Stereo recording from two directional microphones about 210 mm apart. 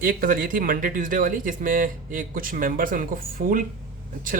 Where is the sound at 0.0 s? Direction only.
40° right (ahead or behind).